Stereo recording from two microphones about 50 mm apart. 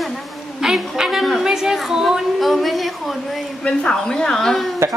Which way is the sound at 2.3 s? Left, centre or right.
Centre.